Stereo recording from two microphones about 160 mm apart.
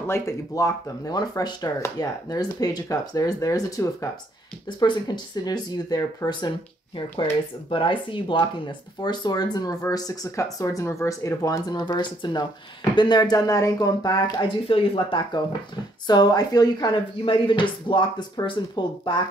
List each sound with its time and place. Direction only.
0.0 s speech: 15° left (ahead or behind)
7.7 s speech: 30° left (ahead or behind)